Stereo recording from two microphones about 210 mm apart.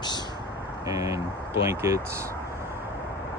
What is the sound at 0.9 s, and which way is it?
Speech, 15° right (ahead or behind).